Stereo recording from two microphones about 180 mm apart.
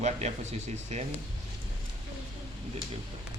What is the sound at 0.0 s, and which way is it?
Speech, 40° right (ahead or behind).